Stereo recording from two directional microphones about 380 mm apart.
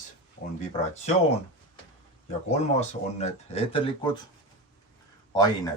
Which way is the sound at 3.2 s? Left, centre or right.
Centre.